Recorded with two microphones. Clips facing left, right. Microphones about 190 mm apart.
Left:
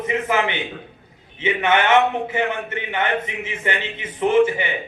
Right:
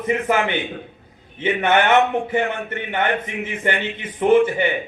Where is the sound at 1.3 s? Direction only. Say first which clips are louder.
Right 1 dB; 50° right (ahead or behind).